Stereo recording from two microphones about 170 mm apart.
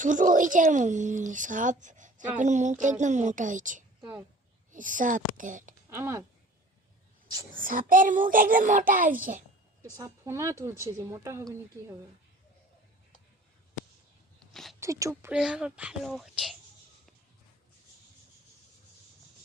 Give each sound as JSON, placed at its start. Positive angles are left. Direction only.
{"t": 0.0, "sound": "a woman's voice", "side_deg": -50}
{"t": 4.0, "sound": "speech", "side_deg": -10}
{"t": 4.7, "sound": "a woman's voice", "side_deg": -50}
{"t": 5.9, "sound": "speech", "side_deg": -15}
{"t": 7.5, "sound": "a woman's voice", "side_deg": -55}
{"t": 9.9, "sound": "speech", "side_deg": -15}
{"t": 14.3, "sound": "a sound", "side_deg": 0}
{"t": 14.8, "sound": "speech", "side_deg": -20}
{"t": 15.3, "sound": "speech", "side_deg": -5}